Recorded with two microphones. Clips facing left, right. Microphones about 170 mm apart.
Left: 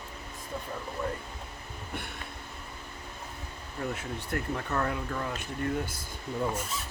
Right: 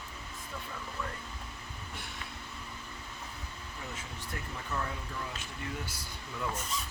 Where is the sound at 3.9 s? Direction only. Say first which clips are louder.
Left 8 dB; 65° left (ahead or behind).